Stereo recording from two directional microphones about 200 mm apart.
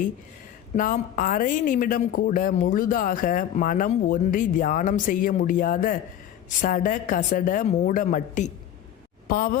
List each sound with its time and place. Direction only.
0.8 s a woman's voice: 45° left (ahead or behind)